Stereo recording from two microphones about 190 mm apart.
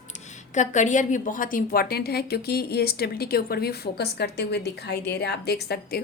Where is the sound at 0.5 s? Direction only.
40° left (ahead or behind).